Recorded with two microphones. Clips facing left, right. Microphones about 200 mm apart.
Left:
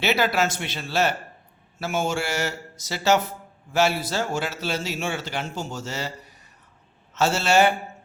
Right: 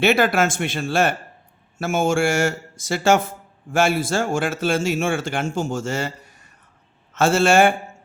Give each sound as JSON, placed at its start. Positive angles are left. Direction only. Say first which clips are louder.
{"t": 0.0, "sound": "a man's voice", "louder": "right 5 dB", "side_deg": -50}